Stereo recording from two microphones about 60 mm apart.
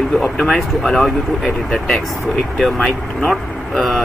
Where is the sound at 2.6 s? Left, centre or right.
Centre.